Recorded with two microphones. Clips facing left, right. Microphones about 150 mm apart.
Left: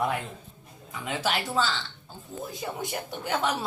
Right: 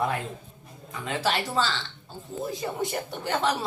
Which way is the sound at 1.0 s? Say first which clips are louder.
Right 2 dB; 5° left (ahead or behind).